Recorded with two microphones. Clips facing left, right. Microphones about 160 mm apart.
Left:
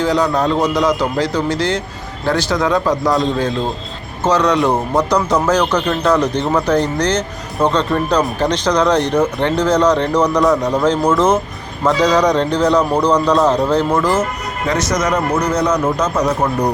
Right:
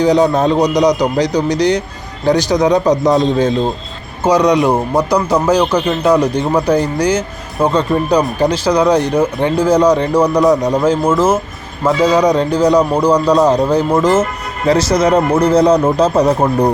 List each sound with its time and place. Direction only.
0.0 s a man's voice: 20° right (ahead or behind)